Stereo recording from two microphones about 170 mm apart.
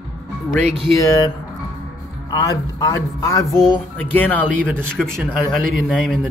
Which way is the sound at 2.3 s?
20° left (ahead or behind).